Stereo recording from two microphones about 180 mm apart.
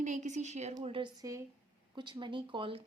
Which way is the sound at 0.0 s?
40° right (ahead or behind).